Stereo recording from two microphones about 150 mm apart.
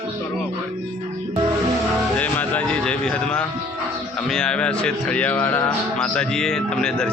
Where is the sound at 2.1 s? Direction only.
10° left (ahead or behind).